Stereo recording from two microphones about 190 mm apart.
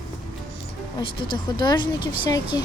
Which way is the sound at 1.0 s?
25° left (ahead or behind).